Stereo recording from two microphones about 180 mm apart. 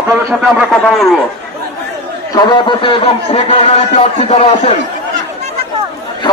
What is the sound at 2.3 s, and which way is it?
Speech, 25° left (ahead or behind).